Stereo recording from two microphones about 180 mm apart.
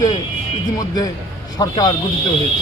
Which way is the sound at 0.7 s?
20° left (ahead or behind).